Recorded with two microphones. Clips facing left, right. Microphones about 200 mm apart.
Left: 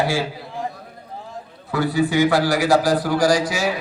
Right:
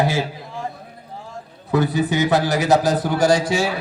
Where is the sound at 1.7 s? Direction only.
20° right (ahead or behind).